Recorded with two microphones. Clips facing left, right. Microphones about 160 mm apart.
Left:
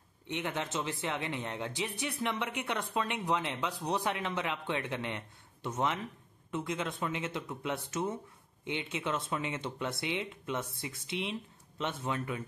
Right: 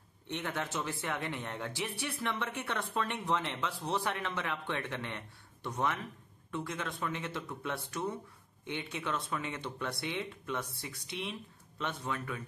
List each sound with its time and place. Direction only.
0.3 s speech: 15° left (ahead or behind)